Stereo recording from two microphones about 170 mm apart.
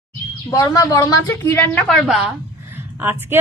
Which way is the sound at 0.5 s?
20° left (ahead or behind).